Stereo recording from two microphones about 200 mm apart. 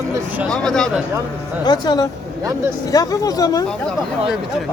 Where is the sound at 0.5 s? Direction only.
5° left (ahead or behind).